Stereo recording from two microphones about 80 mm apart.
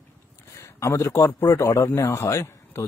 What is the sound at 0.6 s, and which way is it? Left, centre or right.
A man's voice, left.